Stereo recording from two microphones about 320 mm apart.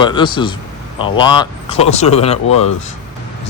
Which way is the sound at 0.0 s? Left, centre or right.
Centre.